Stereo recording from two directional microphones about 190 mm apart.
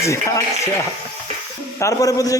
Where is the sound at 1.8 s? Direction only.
15° left (ahead or behind).